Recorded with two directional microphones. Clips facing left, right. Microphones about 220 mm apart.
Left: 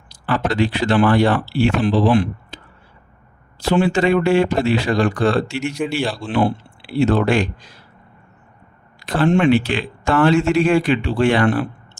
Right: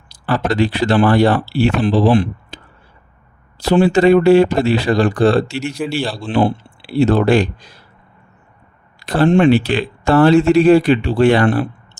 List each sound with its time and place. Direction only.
0.3 s speech: 35° right (ahead or behind)
3.6 s speech: 35° right (ahead or behind)
9.0 s speech: 35° right (ahead or behind)